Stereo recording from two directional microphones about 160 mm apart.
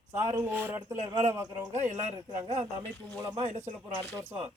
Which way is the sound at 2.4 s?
40° right (ahead or behind).